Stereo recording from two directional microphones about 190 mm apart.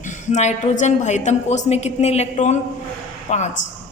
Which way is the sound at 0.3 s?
35° left (ahead or behind).